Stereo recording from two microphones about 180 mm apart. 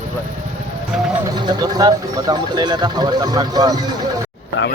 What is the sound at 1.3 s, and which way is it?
Speech, 25° right (ahead or behind).